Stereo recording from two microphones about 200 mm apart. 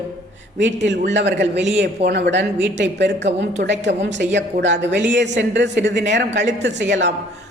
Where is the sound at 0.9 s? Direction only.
60° right (ahead or behind).